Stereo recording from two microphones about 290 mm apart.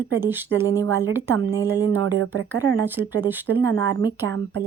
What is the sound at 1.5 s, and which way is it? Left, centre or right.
Speech, centre.